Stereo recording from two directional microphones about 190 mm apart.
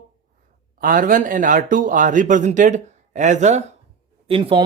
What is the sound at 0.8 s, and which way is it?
Speech, 45° right (ahead or behind).